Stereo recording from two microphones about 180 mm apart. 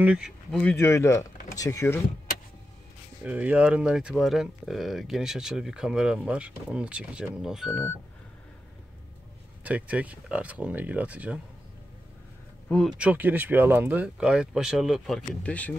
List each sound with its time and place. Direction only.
0.0 s speech: 5° right (ahead or behind); by 2.0 s 20° left (ahead or behind)
3.3 s speech: 10° right (ahead or behind)
9.6 s speech: 10° right (ahead or behind)
12.6 s speech: 5° left (ahead or behind)
12.9 s speech: 5° right (ahead or behind)